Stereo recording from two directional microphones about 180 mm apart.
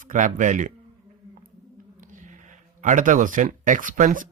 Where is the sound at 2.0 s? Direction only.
45° right (ahead or behind).